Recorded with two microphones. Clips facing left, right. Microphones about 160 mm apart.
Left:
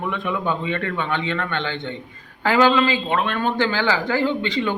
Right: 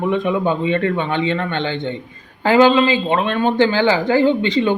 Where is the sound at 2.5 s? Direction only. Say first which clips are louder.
Right 5 dB; 20° right (ahead or behind).